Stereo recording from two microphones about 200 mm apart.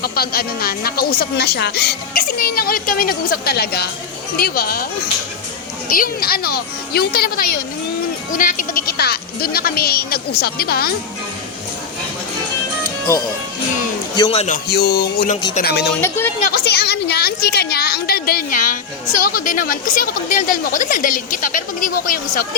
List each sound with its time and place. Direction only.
0.0 s speech: 50° left (ahead or behind)
5.9 s speech: 45° left (ahead or behind)
14.2 s a man's voice: 30° left (ahead or behind)
14.5 s speech: 55° left (ahead or behind)
16.0 s a woman's voice: 10° left (ahead or behind)
16.6 s speech: 55° left (ahead or behind)